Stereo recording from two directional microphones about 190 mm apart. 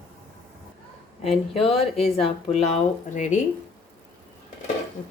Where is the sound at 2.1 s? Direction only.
30° left (ahead or behind).